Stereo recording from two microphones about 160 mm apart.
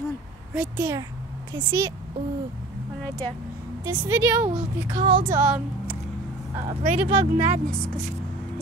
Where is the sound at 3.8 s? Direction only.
15° right (ahead or behind).